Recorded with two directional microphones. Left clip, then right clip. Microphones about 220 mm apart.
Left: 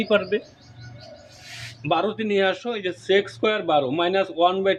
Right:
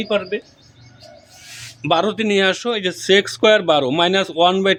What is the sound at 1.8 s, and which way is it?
Speech, 55° right (ahead or behind).